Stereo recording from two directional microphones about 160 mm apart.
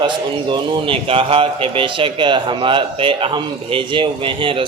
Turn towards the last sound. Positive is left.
turn(degrees=-35)  # may be behind; listen again after turning